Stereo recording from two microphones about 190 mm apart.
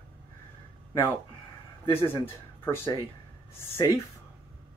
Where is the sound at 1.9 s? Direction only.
10° left (ahead or behind).